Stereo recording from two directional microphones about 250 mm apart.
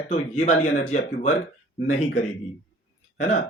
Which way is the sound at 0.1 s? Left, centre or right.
Left.